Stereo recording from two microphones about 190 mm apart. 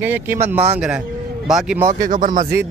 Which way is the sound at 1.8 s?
45° right (ahead or behind).